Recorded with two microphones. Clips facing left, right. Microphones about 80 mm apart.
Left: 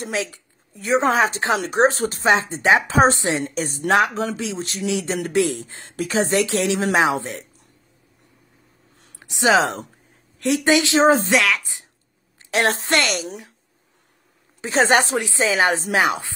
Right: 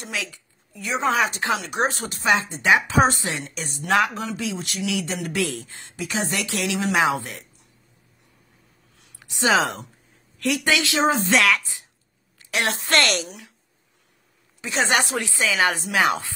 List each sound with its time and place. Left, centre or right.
0.0 s speech: left
3.4 s speech: left
3.9 s a woman's voice: left
5.3 s a woman's voice: left
5.9 s speech: left
6.2 s a woman's voice: left
9.2 s a woman's voice: left
11.3 s a woman's voice: centre
12.4 s a woman's voice: left
12.9 s a woman's voice: centre
14.6 s speech: left
15.1 s a woman's voice: left